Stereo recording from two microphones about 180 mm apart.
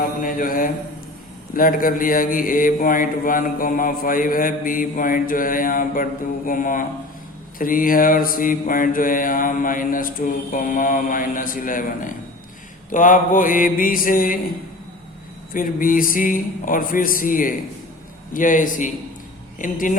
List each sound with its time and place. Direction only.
0.2 s mantra: 50° left (ahead or behind)
1.5 s speech: 50° left (ahead or behind)
15.5 s speech: 50° left (ahead or behind)